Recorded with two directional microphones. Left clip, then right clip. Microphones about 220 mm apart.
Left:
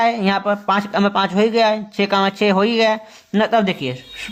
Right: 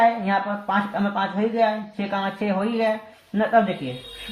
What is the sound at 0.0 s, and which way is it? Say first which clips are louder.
Speech: left 2 dB; 50° left (ahead or behind).